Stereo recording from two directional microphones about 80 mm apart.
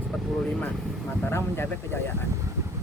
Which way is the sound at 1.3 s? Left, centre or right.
Left.